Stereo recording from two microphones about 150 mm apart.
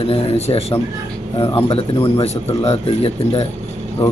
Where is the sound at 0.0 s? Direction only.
40° left (ahead or behind).